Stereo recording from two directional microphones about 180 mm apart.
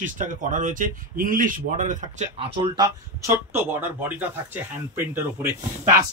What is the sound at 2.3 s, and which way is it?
Speech, 30° right (ahead or behind).